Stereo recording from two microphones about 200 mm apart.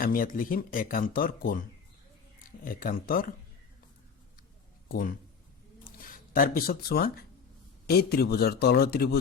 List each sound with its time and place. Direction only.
0.0 s speech: 45° left (ahead or behind)
2.6 s speech: 45° left (ahead or behind)
4.9 s speech: 45° left (ahead or behind)
6.3 s speech: 45° left (ahead or behind)